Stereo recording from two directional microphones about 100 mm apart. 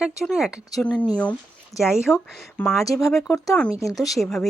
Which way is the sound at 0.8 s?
10° left (ahead or behind).